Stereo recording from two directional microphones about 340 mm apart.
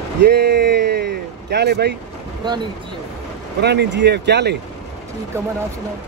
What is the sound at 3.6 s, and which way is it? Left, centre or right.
A man's voice, right.